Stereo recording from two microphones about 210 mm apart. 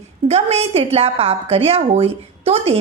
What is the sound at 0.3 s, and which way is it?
A woman's voice, 30° right (ahead or behind).